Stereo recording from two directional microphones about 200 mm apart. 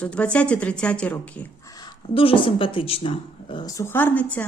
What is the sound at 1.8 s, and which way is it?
Speech, 25° left (ahead or behind).